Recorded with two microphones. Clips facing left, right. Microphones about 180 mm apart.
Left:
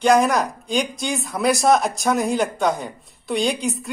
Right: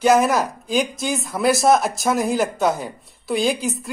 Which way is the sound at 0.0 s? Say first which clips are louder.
Even; 5° right (ahead or behind).